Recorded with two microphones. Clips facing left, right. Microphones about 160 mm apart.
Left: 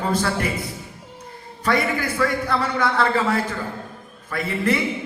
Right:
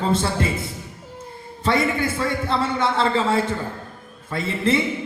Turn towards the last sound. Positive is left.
turn(degrees=-25)  # may be behind; listen again after turning